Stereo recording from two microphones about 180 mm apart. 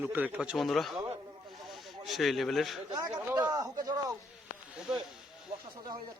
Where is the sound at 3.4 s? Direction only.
20° right (ahead or behind).